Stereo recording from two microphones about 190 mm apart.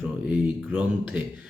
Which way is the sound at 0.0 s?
5° right (ahead or behind).